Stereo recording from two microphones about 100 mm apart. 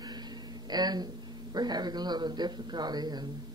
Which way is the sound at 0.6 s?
45° right (ahead or behind).